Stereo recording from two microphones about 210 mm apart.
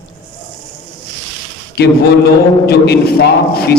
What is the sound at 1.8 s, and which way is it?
A man's voice, 50° left (ahead or behind).